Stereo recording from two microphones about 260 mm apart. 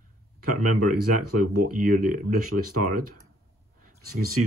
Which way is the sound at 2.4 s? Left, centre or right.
Right.